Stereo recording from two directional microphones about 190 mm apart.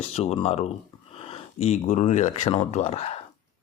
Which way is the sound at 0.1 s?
30° left (ahead or behind).